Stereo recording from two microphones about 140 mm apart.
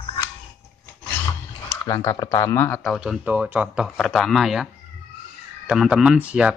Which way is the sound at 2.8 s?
Centre (ahead or behind).